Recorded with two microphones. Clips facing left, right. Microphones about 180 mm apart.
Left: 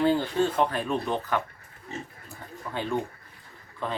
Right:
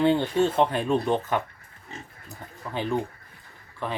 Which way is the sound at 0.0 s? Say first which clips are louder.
Right 2 dB; 25° right (ahead or behind).